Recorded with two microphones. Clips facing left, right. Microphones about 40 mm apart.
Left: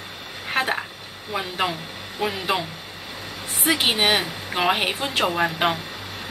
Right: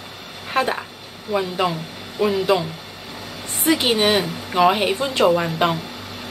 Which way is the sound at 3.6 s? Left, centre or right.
Centre.